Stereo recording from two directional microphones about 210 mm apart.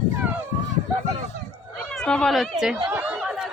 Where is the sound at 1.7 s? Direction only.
5° left (ahead or behind).